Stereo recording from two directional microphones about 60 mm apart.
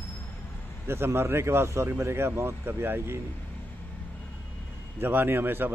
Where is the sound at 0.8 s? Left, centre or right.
Right.